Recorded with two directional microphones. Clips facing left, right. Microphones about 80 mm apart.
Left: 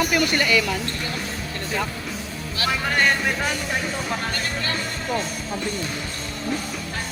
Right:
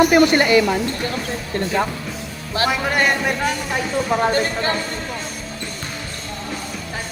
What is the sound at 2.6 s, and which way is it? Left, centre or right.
Speech, centre.